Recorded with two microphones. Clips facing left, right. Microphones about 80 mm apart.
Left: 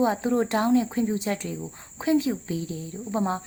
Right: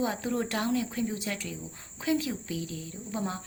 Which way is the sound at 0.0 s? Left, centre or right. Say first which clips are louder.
Left 7 dB; left.